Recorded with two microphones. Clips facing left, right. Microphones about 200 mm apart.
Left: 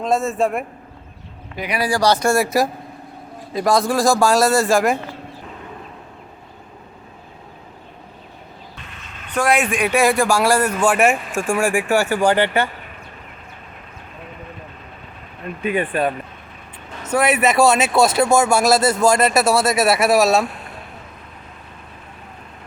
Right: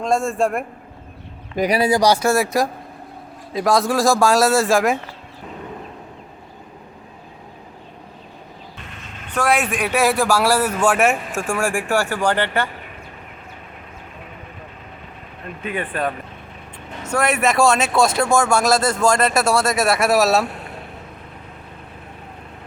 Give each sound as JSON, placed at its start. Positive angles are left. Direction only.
{"t": 0.0, "sound": "speech", "side_deg": 0}
{"t": 1.5, "sound": "speech", "side_deg": -40}
{"t": 1.8, "sound": "speech", "side_deg": -20}
{"t": 9.3, "sound": "speech", "side_deg": -5}
{"t": 15.6, "sound": "speech", "side_deg": 15}